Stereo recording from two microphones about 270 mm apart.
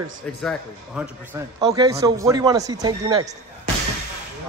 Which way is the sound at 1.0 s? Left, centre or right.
Centre.